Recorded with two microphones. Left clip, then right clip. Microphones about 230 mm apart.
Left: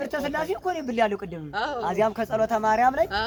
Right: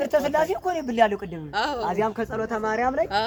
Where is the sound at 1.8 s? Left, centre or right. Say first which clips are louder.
Left 1 dB; left.